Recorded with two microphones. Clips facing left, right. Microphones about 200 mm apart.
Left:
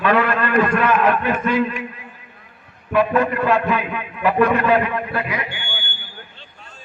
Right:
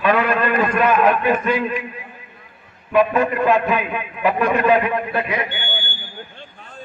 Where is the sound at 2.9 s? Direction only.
15° right (ahead or behind).